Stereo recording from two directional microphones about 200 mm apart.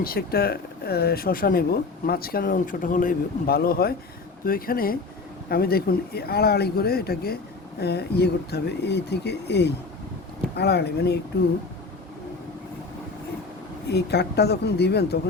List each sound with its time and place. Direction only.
0.0 s speech: 50° left (ahead or behind)
13.9 s speech: 55° left (ahead or behind)